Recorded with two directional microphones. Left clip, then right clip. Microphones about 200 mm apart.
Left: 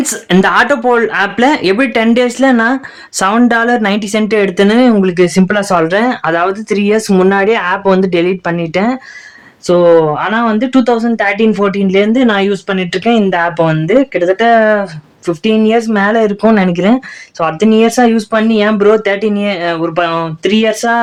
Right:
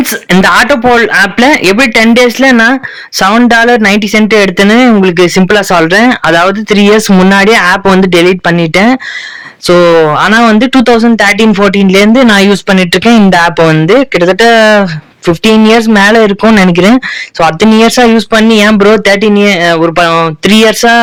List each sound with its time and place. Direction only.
0.0 s speech: 30° right (ahead or behind); by 21.0 s 45° right (ahead or behind)